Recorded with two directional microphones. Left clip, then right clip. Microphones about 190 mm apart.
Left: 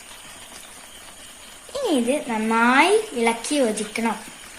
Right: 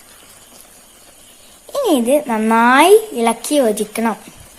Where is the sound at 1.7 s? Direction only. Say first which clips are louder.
Right 8 dB; 55° right (ahead or behind).